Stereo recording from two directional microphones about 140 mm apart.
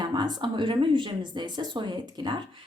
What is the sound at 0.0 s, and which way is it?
A woman's voice, 30° right (ahead or behind).